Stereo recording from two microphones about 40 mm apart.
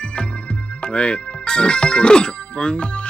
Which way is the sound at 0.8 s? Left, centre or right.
Left.